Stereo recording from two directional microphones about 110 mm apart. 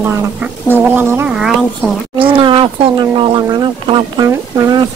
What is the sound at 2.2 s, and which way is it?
Speech, 50° right (ahead or behind).